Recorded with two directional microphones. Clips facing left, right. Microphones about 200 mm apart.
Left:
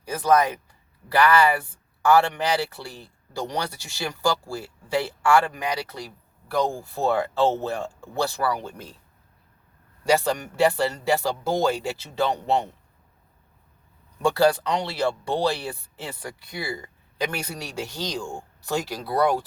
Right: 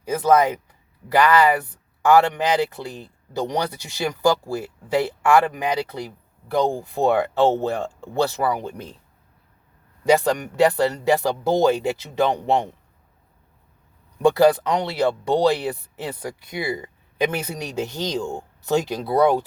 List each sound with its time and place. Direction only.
0.0 s speech: 20° right (ahead or behind)
10.0 s speech: 15° right (ahead or behind)
14.2 s speech: 20° right (ahead or behind)